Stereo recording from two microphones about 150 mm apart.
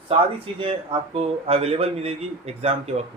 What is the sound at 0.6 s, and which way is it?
Speech, 40° right (ahead or behind).